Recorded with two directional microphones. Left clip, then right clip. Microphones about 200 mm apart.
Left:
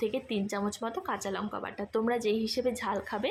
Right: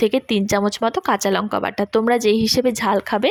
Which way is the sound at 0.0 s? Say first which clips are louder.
Right 13 dB; 45° right (ahead or behind).